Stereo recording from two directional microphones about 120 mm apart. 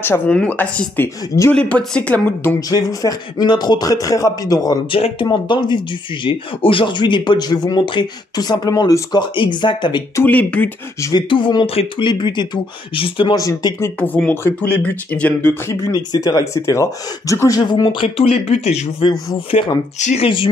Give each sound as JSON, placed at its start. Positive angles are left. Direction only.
{"t": 0.0, "sound": "speech", "side_deg": 15}
{"t": 2.7, "sound": "speech", "side_deg": 30}
{"t": 10.1, "sound": "speech", "side_deg": 15}
{"t": 11.0, "sound": "speech", "side_deg": 30}
{"t": 11.2, "sound": "speech", "side_deg": 45}
{"t": 12.1, "sound": "speech", "side_deg": 40}
{"t": 13.4, "sound": "speech", "side_deg": 30}
{"t": 13.8, "sound": "speech", "side_deg": 15}
{"t": 15.9, "sound": "speech", "side_deg": 35}
{"t": 17.6, "sound": "speech", "side_deg": 40}
{"t": 20.2, "sound": "speech", "side_deg": 45}